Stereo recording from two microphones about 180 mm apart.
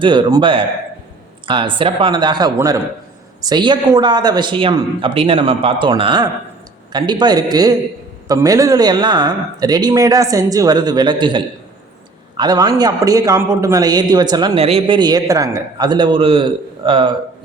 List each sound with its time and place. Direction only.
0.0 s a man's voice: 25° right (ahead or behind)